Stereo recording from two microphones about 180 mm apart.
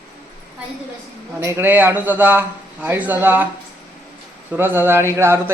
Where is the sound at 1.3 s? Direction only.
15° right (ahead or behind).